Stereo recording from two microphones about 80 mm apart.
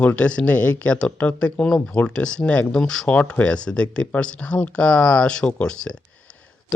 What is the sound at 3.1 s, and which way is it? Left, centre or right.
Speech, centre.